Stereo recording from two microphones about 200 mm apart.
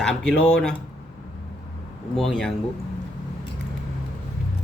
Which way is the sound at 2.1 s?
Centre (ahead or behind).